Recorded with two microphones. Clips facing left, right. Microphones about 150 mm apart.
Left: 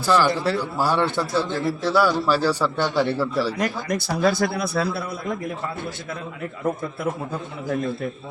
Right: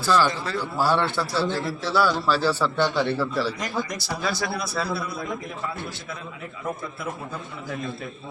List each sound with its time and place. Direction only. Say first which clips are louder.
0.0 s a man's voice: left 3 dB; 10° left (ahead or behind)
3.6 s a man's voice: left 4 dB; 55° left (ahead or behind)